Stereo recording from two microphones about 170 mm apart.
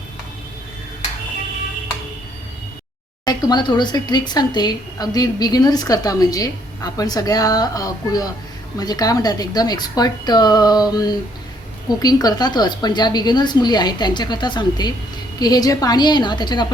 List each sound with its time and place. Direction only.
3.2 s a woman's voice: 25° left (ahead or behind)